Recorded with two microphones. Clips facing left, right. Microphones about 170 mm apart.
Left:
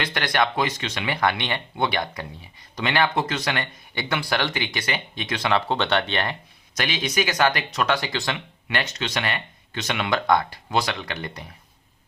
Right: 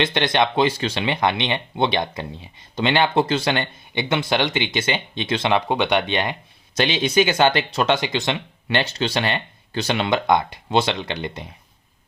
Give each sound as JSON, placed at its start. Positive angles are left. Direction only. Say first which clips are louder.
{"t": 0.0, "sound": "speech", "louder": "right 4 dB", "side_deg": -25}
{"t": 6.7, "sound": "speech", "louder": "right 7 dB", "side_deg": -25}
{"t": 8.6, "sound": "speech", "louder": "right 5 dB", "side_deg": -30}